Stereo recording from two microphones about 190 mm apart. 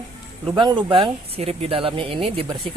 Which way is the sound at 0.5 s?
25° right (ahead or behind).